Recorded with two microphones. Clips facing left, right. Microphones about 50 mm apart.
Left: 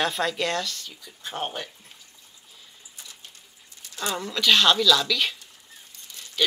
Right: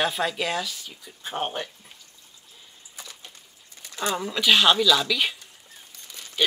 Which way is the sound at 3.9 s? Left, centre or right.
Right.